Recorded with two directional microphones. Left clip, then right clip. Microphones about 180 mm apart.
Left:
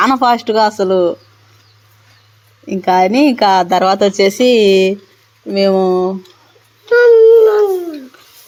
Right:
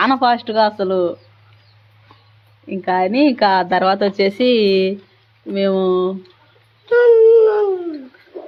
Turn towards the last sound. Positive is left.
turn(degrees=30)  # may be behind; listen again after turning